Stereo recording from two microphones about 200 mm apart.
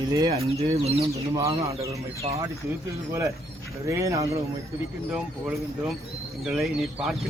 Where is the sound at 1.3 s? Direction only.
15° right (ahead or behind).